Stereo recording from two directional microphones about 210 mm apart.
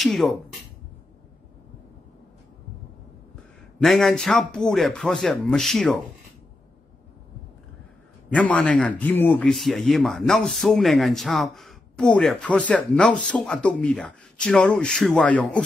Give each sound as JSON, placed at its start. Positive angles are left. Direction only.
{"t": 0.0, "sound": "speech", "side_deg": 0}
{"t": 3.8, "sound": "speech", "side_deg": 0}
{"t": 8.4, "sound": "speech", "side_deg": 5}